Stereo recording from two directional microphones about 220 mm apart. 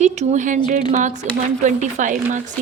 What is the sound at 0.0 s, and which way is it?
Speech, 30° right (ahead or behind).